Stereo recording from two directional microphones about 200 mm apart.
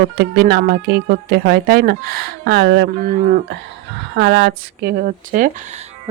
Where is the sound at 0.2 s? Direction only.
55° right (ahead or behind).